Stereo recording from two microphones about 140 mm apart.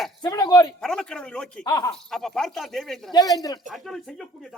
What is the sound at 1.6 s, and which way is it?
Speech, 25° left (ahead or behind).